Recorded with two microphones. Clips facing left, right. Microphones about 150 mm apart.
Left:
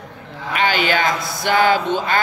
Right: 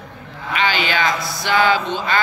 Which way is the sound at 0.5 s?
50° left (ahead or behind).